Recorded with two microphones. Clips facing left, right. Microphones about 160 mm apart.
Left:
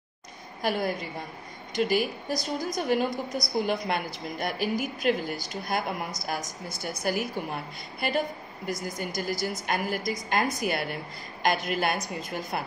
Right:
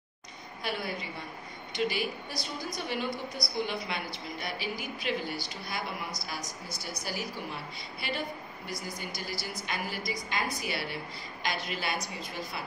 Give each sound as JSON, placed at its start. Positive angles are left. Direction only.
{"t": 0.6, "sound": "a woman's voice", "side_deg": 45}